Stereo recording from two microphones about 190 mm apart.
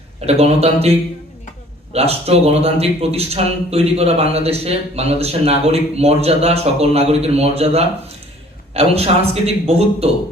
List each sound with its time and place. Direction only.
0.3 s a man's voice: 35° right (ahead or behind)